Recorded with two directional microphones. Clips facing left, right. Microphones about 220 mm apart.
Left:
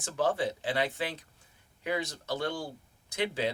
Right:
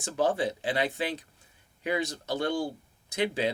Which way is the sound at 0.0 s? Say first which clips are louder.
Right 2 dB; 15° right (ahead or behind).